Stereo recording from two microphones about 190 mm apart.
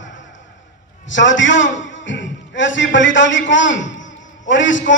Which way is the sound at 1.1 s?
75° left (ahead or behind).